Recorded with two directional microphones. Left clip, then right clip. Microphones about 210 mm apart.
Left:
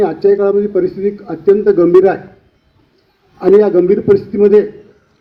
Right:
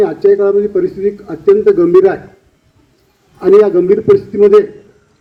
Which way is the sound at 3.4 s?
20° left (ahead or behind).